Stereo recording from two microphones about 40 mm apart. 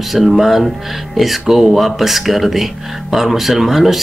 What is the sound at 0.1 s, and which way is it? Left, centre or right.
Speech, centre.